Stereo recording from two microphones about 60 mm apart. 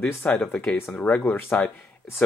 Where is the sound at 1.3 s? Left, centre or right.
Left.